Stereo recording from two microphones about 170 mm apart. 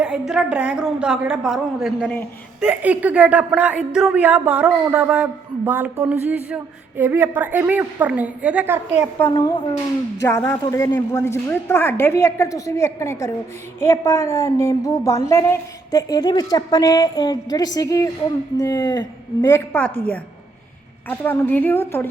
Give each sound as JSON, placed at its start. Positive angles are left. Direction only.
{"t": 0.0, "sound": "a woman's voice", "side_deg": -5}
{"t": 10.2, "sound": "a woman's voice", "side_deg": 15}
{"t": 21.1, "sound": "a woman's voice", "side_deg": 10}